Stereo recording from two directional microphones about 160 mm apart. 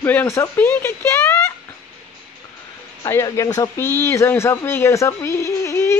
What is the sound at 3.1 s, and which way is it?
Speech, 20° left (ahead or behind).